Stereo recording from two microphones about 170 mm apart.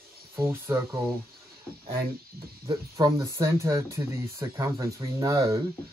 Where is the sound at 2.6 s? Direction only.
25° right (ahead or behind).